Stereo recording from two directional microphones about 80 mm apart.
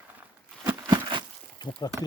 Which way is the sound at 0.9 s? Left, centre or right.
Right.